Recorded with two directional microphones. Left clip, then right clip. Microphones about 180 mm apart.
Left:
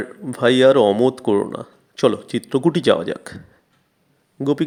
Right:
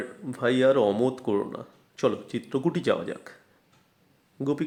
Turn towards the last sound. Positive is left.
turn(degrees=20)  # may be behind; listen again after turning